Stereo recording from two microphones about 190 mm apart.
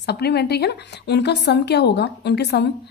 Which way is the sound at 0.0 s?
60° left (ahead or behind).